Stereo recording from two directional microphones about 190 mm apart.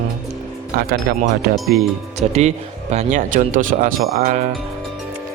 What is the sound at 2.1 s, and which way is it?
Speech, 35° right (ahead or behind).